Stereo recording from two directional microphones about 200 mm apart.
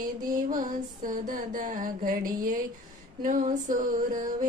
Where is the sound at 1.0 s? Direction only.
40° right (ahead or behind).